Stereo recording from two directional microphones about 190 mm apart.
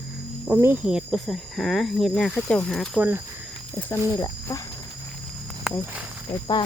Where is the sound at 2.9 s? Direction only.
10° right (ahead or behind).